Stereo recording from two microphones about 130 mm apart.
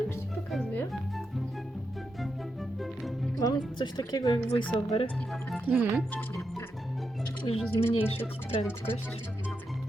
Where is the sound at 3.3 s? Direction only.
30° left (ahead or behind).